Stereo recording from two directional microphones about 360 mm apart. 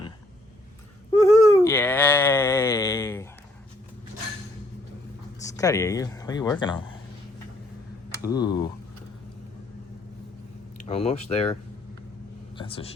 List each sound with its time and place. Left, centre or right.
1.2 s a sound: centre
5.4 s speech: centre
8.2 s speech: centre
10.8 s speech: centre
12.5 s vehicle: centre